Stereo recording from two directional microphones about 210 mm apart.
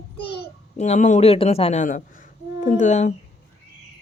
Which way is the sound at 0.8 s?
35° left (ahead or behind).